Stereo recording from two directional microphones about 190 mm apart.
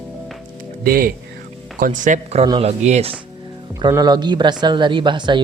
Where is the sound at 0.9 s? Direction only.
50° right (ahead or behind).